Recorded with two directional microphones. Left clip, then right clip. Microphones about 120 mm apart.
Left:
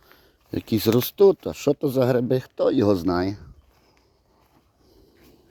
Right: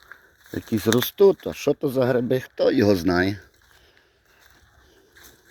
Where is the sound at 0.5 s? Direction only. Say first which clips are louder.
Left 2 dB; 60° left (ahead or behind).